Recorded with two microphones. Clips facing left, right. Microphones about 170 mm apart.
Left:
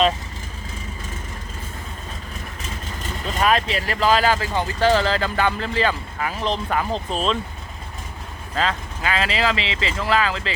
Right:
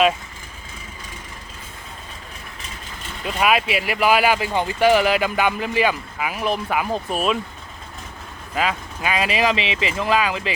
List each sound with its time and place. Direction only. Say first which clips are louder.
3.2 s speech: right 1 dB; 10° right (ahead or behind)
8.5 s speech: right 1 dB; 15° right (ahead or behind)